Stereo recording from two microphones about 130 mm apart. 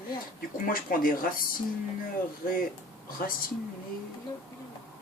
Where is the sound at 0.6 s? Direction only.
90° left.